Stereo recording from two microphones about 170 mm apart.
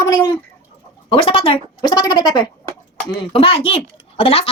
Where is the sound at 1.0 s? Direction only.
30° left (ahead or behind).